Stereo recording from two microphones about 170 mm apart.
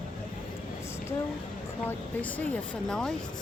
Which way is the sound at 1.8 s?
10° left (ahead or behind).